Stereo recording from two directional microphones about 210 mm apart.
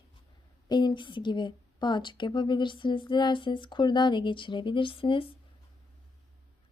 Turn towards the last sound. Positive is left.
turn(degrees=25)  # may be behind; listen again after turning